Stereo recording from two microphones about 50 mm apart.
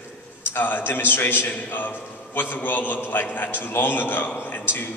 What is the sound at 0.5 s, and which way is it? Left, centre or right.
A man's voice, left.